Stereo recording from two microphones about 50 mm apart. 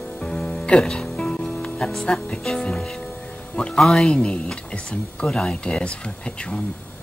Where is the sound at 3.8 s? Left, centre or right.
Centre.